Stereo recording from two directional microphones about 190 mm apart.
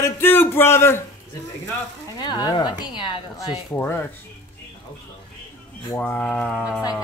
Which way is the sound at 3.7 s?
10° left (ahead or behind).